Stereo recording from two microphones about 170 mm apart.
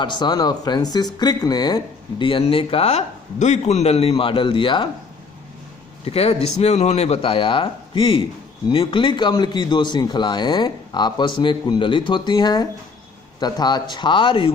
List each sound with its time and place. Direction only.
0.0 s speech: 25° left (ahead or behind)
6.1 s speech: 35° left (ahead or behind)